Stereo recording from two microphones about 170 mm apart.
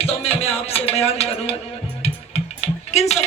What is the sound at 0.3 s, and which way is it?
Speech, 35° left (ahead or behind).